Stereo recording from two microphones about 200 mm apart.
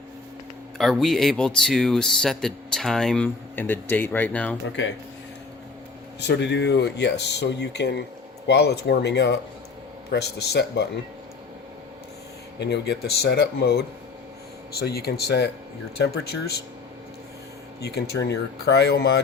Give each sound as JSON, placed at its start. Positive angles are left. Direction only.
{"t": 0.8, "sound": "speech", "side_deg": 0}
{"t": 6.1, "sound": "speech", "side_deg": 60}
{"t": 12.5, "sound": "speech", "side_deg": 55}
{"t": 17.7, "sound": "speech", "side_deg": 55}